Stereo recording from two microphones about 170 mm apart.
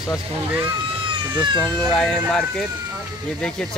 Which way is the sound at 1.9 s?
Centre (ahead or behind).